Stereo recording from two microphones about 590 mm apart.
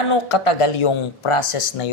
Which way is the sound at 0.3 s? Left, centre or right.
Left.